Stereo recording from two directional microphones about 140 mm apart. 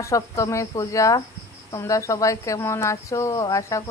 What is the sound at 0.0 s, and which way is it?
Speech, 20° left (ahead or behind).